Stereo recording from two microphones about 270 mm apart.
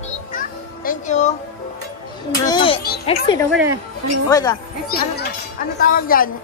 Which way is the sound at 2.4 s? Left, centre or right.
Centre.